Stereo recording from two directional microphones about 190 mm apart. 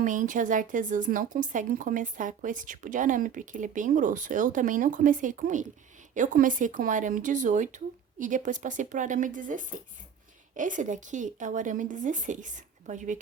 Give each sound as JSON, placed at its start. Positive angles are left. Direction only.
{"t": 0.0, "sound": "a woman's voice", "side_deg": -45}